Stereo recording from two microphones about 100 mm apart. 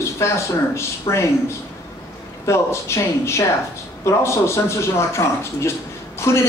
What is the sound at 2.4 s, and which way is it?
Speech, 30° left (ahead or behind).